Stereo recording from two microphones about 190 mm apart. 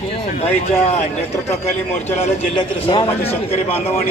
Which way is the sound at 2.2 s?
25° left (ahead or behind).